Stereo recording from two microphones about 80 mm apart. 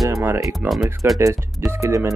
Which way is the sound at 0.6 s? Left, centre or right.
Right.